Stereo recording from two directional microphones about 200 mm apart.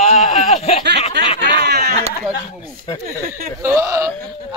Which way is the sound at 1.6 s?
55° right (ahead or behind).